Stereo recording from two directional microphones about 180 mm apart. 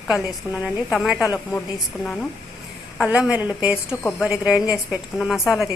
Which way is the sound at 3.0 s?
5° right (ahead or behind).